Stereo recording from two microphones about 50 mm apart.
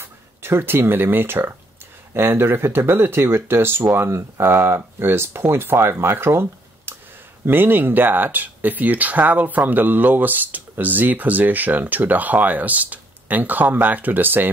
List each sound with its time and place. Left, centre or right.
0.0 s speech: right